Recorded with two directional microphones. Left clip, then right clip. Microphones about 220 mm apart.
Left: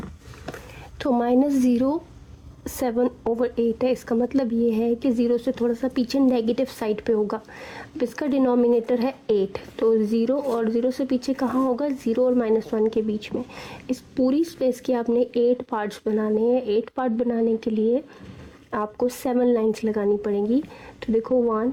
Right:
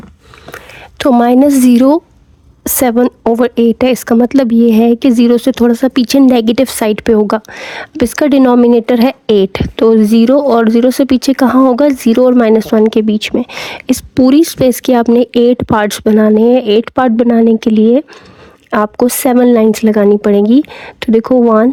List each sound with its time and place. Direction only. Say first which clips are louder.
0.5 s a woman's voice: right 13 dB; 45° right (ahead or behind)